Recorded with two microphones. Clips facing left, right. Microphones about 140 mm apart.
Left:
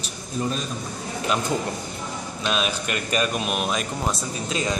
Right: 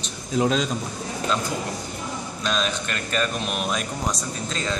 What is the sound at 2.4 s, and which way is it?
Speech, 10° left (ahead or behind).